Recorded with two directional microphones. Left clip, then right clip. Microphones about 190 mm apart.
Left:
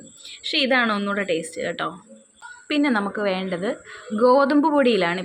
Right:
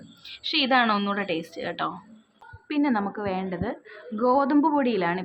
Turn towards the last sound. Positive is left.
turn(degrees=15)  # may be behind; listen again after turning